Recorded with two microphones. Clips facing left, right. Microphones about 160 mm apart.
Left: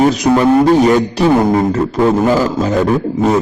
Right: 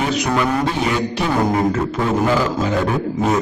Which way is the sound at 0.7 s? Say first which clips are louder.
Left 10 dB; 45° left (ahead or behind).